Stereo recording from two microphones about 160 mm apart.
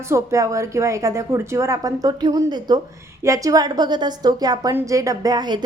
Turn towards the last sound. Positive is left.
turn(degrees=-25)  # may be behind; listen again after turning